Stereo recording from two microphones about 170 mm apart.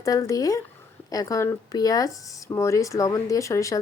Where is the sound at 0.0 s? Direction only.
20° left (ahead or behind).